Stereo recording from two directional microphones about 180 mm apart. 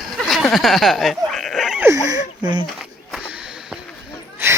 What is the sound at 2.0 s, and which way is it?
Speech, 20° right (ahead or behind).